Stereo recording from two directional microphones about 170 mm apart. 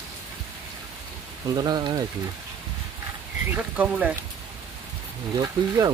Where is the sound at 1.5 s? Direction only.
25° right (ahead or behind).